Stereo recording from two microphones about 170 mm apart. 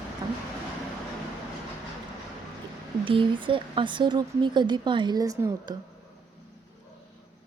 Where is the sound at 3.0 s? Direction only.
30° right (ahead or behind).